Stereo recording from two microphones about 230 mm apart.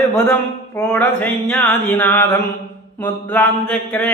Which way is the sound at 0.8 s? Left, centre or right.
Centre.